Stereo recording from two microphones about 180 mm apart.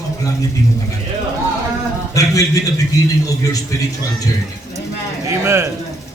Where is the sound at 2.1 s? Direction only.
20° left (ahead or behind).